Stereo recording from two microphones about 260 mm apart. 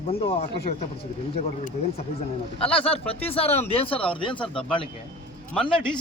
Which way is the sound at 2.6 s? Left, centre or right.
Left.